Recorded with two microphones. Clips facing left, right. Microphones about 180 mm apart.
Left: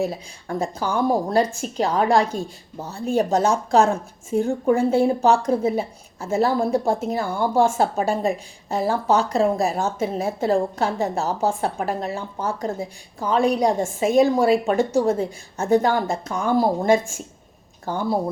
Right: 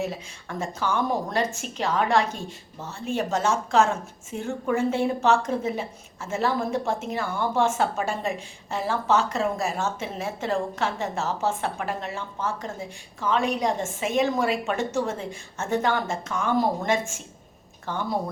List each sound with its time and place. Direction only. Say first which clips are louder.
0.0 s a woman's voice: left 5 dB; 35° left (ahead or behind)